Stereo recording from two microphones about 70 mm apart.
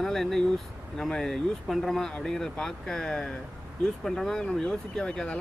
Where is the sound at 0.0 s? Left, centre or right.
Centre.